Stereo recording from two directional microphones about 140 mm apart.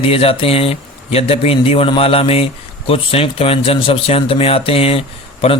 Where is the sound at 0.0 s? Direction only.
45° left (ahead or behind).